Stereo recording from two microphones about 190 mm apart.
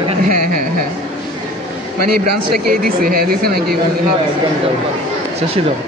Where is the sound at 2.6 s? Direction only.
50° right (ahead or behind).